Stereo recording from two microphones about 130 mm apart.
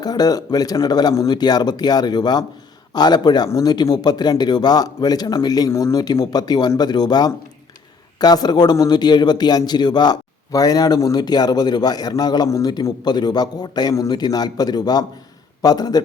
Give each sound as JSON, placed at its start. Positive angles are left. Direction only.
{"t": 0.0, "sound": "a man's voice", "side_deg": 30}